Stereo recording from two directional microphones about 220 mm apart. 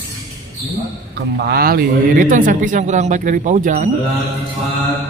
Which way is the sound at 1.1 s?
45° right (ahead or behind).